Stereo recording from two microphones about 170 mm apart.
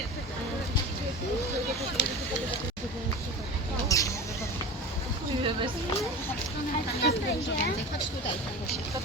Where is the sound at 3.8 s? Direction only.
20° left (ahead or behind).